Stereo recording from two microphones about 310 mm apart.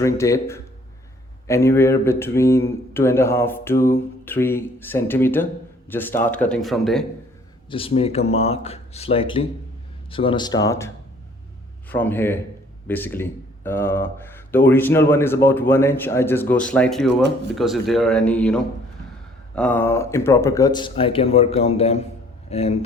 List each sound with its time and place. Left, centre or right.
0.0 s speech: centre
7.7 s speech: centre